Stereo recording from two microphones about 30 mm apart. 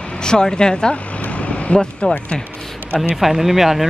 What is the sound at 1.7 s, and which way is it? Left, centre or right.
Speech, left.